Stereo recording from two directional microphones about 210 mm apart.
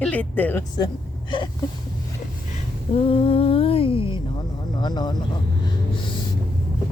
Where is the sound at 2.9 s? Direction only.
25° left (ahead or behind).